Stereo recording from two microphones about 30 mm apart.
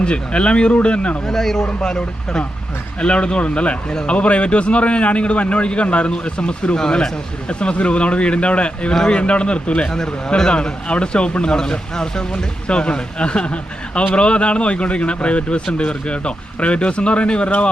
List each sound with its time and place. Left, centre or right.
0.0 s speech: left
1.3 s speech: centre
1.6 s speech: left
3.0 s speech: left
6.7 s speech: left
7.4 s speech: left
9.8 s speech: left
10.5 s speech: left
11.5 s speech: left